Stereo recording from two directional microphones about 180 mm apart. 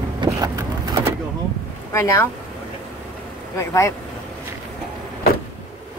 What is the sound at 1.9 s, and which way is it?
Speech, 15° left (ahead or behind).